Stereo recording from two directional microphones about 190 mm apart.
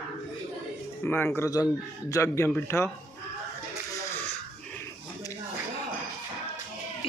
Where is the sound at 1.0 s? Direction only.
10° left (ahead or behind).